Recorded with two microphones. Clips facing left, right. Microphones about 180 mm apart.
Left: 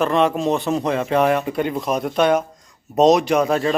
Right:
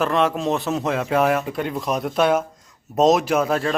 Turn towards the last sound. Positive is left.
turn(degrees=0)  # may be behind; listen again after turning